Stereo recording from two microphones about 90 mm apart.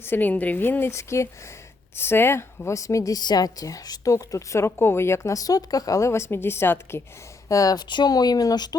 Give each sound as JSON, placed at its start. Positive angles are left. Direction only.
{"t": 0.0, "sound": "a woman's voice", "side_deg": 20}
{"t": 7.4, "sound": "speech", "side_deg": 40}